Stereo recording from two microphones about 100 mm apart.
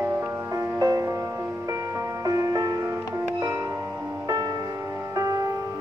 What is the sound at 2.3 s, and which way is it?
Music, 35° right (ahead or behind).